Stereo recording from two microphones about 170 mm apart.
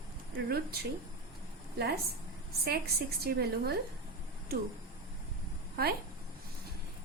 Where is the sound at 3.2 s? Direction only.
70° right (ahead or behind).